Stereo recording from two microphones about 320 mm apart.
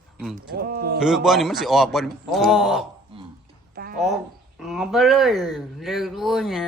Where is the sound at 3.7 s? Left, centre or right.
Right.